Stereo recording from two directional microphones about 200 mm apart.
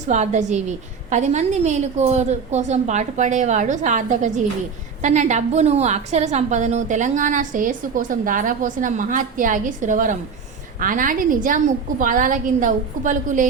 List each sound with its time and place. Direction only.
0.1 s a woman's voice: 35° right (ahead or behind)